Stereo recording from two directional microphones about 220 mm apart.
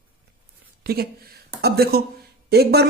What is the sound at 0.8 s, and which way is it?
A woman's voice, 45° right (ahead or behind).